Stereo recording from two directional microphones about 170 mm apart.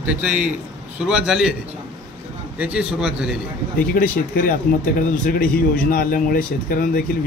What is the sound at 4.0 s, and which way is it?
Speech, 55° left (ahead or behind).